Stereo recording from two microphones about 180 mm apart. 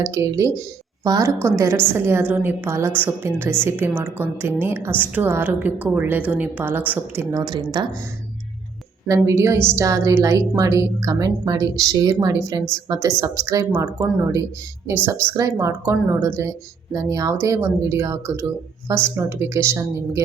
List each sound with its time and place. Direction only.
0.0 s speech: 20° right (ahead or behind)
9.0 s a woman's voice: 15° right (ahead or behind)